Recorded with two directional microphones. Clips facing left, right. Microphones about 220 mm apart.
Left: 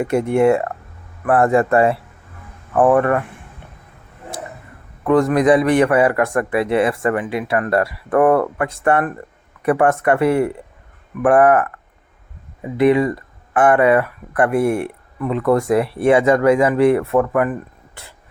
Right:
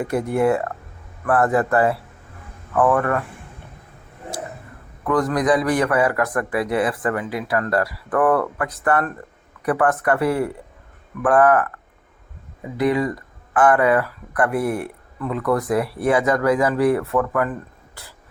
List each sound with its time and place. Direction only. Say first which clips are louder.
0.0 s speech: left 4 dB; 25° left (ahead or behind)
5.0 s speech: left 5 dB; 25° left (ahead or behind)
12.7 s speech: left 5 dB; 25° left (ahead or behind)